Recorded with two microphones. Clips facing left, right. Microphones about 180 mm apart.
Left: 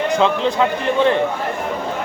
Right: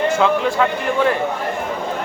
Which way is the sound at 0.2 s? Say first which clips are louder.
Even; 20° left (ahead or behind).